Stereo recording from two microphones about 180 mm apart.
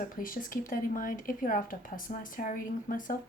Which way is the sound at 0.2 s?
50° left (ahead or behind).